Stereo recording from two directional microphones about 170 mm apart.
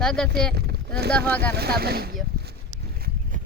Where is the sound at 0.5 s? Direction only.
70° right (ahead or behind).